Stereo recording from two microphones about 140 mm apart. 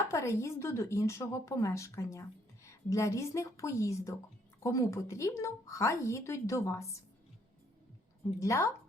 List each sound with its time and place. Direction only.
0.0 s speech: 20° left (ahead or behind)
8.4 s speech: 20° left (ahead or behind)